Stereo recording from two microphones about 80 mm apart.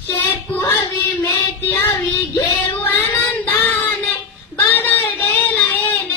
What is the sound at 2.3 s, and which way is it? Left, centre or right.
Female singing, left.